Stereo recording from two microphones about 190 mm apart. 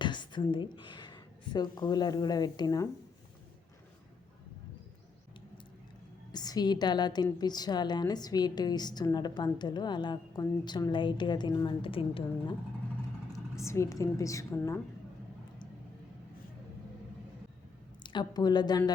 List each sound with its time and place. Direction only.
0.0 s a woman's voice: 25° left (ahead or behind)
6.3 s a woman's voice: 20° left (ahead or behind)
13.6 s a woman's voice: 15° left (ahead or behind)
18.0 s a woman's voice: 25° left (ahead or behind)